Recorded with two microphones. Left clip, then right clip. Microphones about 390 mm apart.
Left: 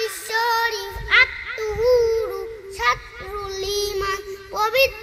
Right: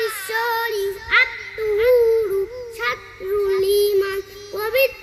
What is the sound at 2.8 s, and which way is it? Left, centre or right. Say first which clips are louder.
Child singing: left 3 dB; left.